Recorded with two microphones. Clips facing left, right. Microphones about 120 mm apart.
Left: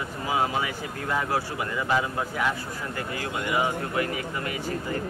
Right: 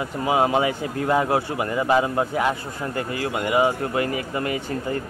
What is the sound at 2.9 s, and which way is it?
Speech, 50° right (ahead or behind).